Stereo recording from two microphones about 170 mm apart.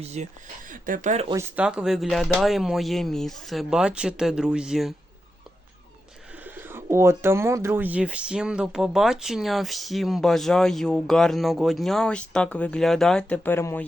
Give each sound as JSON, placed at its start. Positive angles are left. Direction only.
{"t": 0.0, "sound": "speech", "side_deg": -40}
{"t": 1.5, "sound": "speech", "side_deg": -5}
{"t": 6.3, "sound": "speech", "side_deg": -10}